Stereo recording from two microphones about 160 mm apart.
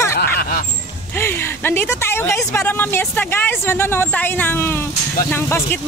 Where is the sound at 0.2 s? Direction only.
65° left (ahead or behind).